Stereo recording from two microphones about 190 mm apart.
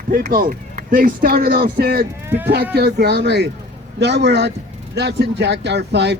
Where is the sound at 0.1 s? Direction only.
50° right (ahead or behind).